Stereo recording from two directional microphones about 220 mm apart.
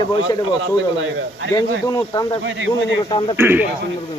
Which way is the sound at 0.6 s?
60° right (ahead or behind).